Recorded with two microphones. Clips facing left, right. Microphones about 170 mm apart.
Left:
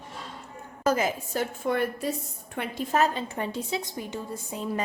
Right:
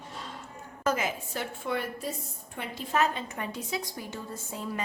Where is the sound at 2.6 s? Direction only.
60° left (ahead or behind).